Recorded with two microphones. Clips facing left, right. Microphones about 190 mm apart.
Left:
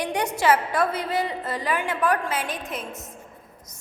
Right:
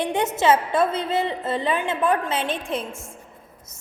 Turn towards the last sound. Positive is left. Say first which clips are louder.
# right 5 dB
turn(degrees=-30)  # may be behind; listen again after turning